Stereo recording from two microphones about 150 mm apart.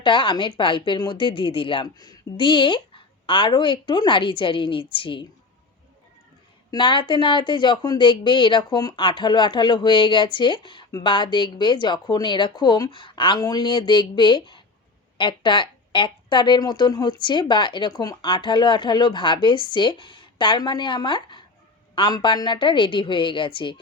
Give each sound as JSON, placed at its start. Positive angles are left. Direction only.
{"t": 0.0, "sound": "speech", "side_deg": 30}
{"t": 6.7, "sound": "speech", "side_deg": 30}